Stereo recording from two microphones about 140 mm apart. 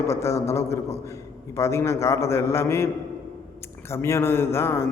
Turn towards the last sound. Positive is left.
turn(degrees=15)  # may be behind; listen again after turning